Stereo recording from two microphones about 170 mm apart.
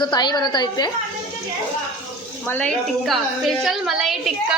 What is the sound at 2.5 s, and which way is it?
A woman's voice, 5° left (ahead or behind).